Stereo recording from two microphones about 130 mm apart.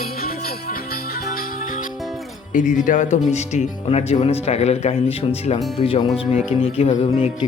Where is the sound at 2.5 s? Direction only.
85° left; by 6.9 s 50° left (ahead or behind).